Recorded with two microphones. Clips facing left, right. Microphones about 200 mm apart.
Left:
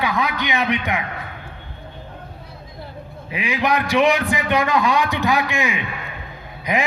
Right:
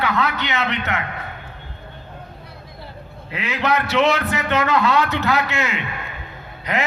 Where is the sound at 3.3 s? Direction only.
15° left (ahead or behind).